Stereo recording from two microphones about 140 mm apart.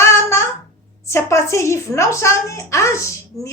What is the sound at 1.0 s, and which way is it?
A woman's voice, 20° left (ahead or behind).